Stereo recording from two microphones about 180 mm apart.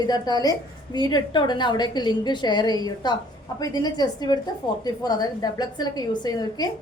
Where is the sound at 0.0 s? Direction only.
20° left (ahead or behind).